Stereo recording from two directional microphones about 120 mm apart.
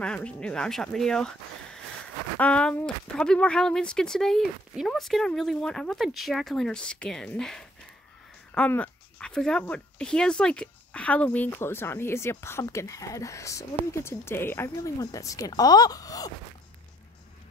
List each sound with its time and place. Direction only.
0.0 s speech: 10° left (ahead or behind)
2.3 s speech: 10° left (ahead or behind)
15.0 s speech: 30° left (ahead or behind)